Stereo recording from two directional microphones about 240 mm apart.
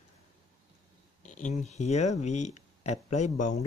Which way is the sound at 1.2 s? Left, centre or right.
Left.